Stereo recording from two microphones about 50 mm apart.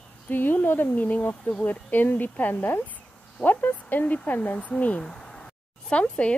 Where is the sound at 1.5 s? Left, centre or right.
Left.